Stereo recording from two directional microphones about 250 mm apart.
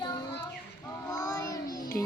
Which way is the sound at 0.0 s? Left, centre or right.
Centre.